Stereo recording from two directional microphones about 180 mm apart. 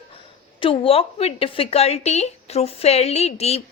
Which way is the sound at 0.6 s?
30° left (ahead or behind).